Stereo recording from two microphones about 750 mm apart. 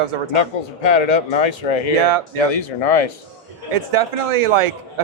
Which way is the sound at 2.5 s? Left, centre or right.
Left.